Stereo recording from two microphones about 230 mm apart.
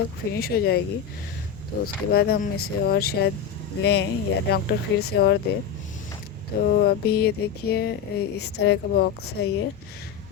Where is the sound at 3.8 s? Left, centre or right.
Left.